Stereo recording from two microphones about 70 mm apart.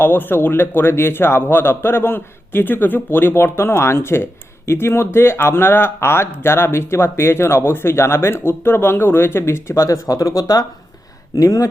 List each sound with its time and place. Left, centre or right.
0.0 s a man's voice: left